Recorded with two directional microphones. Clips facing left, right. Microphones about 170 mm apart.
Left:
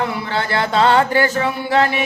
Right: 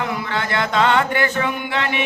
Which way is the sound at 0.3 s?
35° left (ahead or behind).